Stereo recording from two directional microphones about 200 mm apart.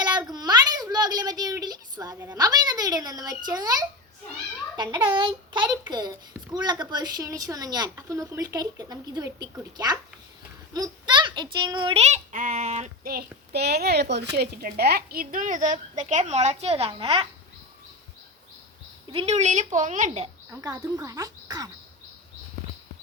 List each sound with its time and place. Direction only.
0.0 s a sound: 20° right (ahead or behind)
4.8 s a woman's voice: 25° right (ahead or behind)
13.1 s a child's voice: 55° right (ahead or behind); by 17.2 s 30° right (ahead or behind)
19.1 s a woman's voice: 30° right (ahead or behind)
20.5 s speech: 15° right (ahead or behind)